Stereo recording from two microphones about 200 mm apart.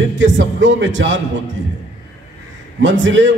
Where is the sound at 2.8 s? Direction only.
65° right (ahead or behind).